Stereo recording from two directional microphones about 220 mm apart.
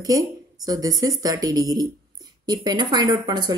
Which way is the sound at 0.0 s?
15° right (ahead or behind).